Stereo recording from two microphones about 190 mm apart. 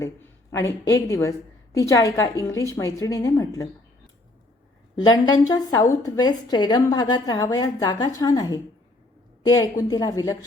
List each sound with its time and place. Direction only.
0.0 s a woman's voice: 15° left (ahead or behind)
4.9 s a woman's voice: 20° left (ahead or behind)